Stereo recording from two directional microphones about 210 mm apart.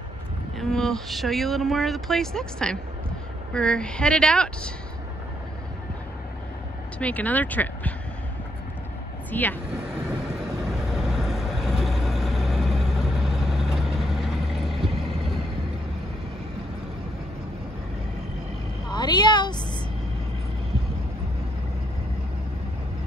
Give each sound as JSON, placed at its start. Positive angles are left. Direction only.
{"t": 0.6, "sound": "speech", "side_deg": 0}
{"t": 7.0, "sound": "speech", "side_deg": 5}
{"t": 9.3, "sound": "speech", "side_deg": 10}
{"t": 10.9, "sound": "vehicle", "side_deg": 0}
{"t": 18.9, "sound": "a sound", "side_deg": 20}